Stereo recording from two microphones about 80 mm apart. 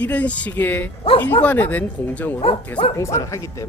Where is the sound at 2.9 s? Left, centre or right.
Left.